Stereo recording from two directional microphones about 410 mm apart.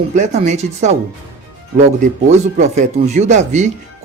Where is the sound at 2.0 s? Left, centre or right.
Centre.